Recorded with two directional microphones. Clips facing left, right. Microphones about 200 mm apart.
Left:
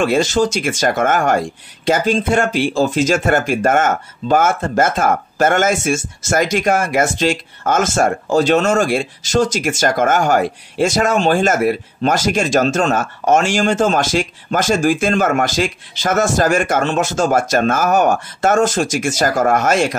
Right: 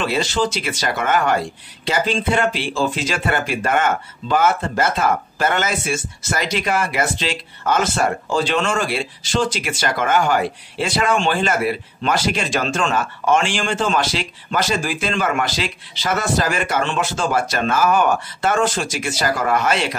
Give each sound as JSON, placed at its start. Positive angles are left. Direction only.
{"t": 0.0, "sound": "speech", "side_deg": 45}